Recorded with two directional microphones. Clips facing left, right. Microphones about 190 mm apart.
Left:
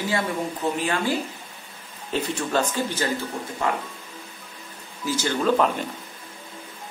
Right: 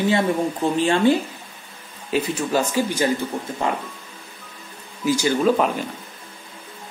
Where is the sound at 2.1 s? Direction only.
10° right (ahead or behind).